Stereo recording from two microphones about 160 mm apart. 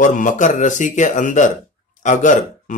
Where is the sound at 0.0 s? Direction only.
50° left (ahead or behind).